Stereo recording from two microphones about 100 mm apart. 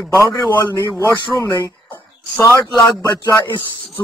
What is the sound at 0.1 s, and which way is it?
Speech, 30° left (ahead or behind).